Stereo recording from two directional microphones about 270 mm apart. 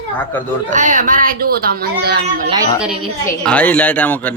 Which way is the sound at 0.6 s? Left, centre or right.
Right.